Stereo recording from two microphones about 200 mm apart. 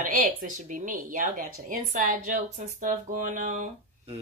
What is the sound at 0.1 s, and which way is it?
Speech, 40° right (ahead or behind).